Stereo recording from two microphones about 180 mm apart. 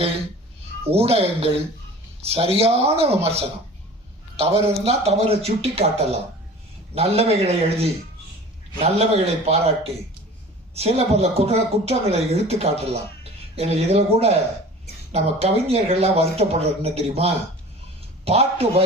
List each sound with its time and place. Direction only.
0.9 s a woman's voice: 35° right (ahead or behind)
10.8 s a woman's voice: 35° right (ahead or behind)